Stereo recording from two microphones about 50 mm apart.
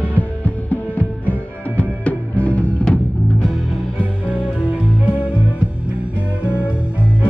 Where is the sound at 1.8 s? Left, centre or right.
Left.